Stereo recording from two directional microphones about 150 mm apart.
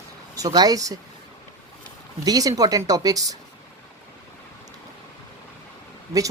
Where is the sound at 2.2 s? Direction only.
25° right (ahead or behind).